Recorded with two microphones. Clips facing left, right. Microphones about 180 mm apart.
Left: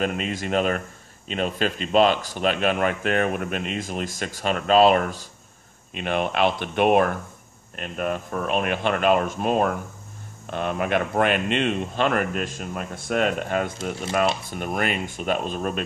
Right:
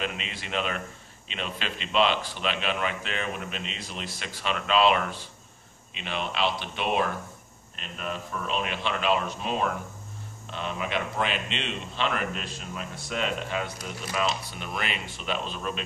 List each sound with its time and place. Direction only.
0.0 s speech: 45° left (ahead or behind)